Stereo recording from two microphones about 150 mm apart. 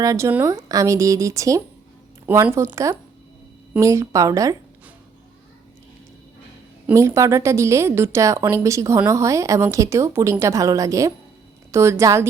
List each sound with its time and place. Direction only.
0.0 s a woman's voice: 20° right (ahead or behind)
6.8 s a woman's voice: 20° right (ahead or behind)